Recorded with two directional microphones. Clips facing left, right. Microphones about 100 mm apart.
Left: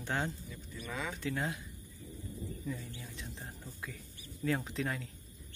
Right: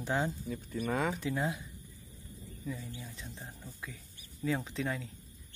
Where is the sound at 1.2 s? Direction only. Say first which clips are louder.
Right 3 dB; 15° right (ahead or behind).